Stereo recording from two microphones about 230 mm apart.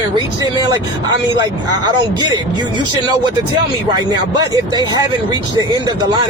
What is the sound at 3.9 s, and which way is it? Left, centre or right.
Speech, centre.